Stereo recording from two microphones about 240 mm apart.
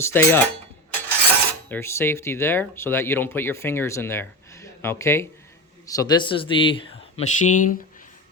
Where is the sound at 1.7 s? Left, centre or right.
Centre; by 7.7 s left.